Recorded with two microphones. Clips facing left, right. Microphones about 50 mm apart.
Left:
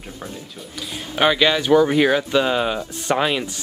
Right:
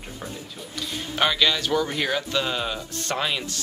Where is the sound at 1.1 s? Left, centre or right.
Centre.